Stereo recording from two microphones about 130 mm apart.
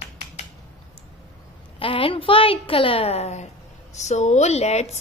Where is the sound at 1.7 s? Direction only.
45° left (ahead or behind).